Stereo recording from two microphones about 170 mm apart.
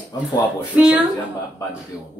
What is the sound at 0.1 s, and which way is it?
Speech, 25° left (ahead or behind).